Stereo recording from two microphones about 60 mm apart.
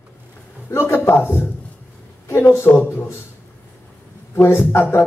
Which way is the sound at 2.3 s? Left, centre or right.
Left.